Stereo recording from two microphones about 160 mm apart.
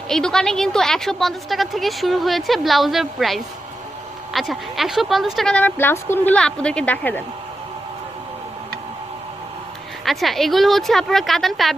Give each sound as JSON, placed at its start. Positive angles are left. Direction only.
{"t": 0.1, "sound": "a woman's voice", "side_deg": 5}
{"t": 10.0, "sound": "a woman's voice", "side_deg": 0}